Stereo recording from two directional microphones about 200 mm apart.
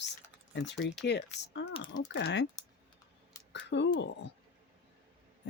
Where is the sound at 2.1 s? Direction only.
60° left (ahead or behind).